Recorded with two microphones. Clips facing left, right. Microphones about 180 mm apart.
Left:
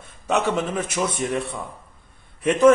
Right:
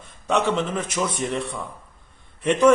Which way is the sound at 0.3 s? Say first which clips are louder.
Even; 10° left (ahead or behind).